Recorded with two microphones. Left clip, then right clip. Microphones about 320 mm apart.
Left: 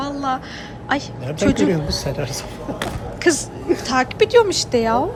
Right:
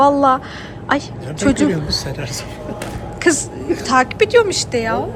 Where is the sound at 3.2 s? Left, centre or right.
Centre.